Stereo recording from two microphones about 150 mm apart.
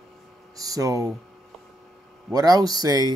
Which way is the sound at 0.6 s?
25° right (ahead or behind).